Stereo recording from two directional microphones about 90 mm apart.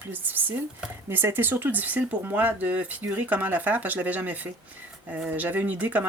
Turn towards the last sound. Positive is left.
turn(degrees=-20)  # may be behind; listen again after turning